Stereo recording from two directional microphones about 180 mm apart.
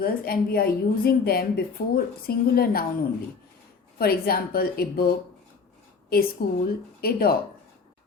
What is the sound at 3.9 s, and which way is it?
A woman's voice, 60° left (ahead or behind).